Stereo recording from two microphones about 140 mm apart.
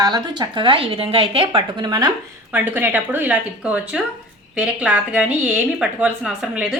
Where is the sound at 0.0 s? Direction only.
30° right (ahead or behind).